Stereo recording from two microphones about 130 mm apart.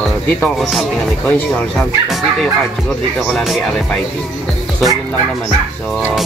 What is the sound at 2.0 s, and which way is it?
Music, centre (ahead or behind).